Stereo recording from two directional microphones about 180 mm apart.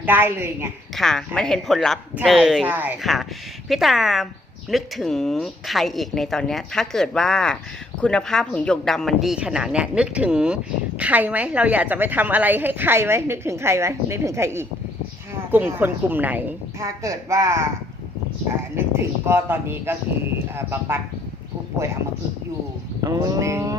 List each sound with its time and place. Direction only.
0.0 s a woman's voice: 10° right (ahead or behind)
0.9 s a woman's voice: 5° left (ahead or behind); by 17.7 s 15° right (ahead or behind)
18.9 s a woman's voice: 15° right (ahead or behind)
23.0 s livestock: 20° right (ahead or behind)